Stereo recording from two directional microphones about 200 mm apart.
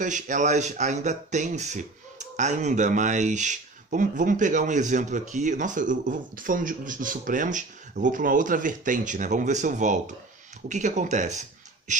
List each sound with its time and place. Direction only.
0.0 s speech: 40° right (ahead or behind)